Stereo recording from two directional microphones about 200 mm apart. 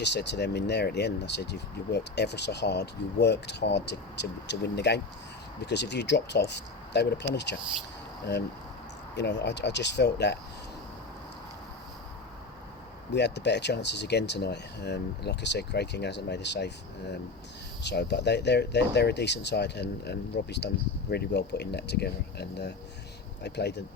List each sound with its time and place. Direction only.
0.0 s speech: 60° left (ahead or behind)
9.1 s speech: 60° left (ahead or behind)
13.1 s speech: 60° left (ahead or behind)